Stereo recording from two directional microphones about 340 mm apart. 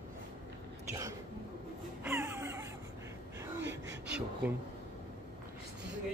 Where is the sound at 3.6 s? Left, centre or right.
Right.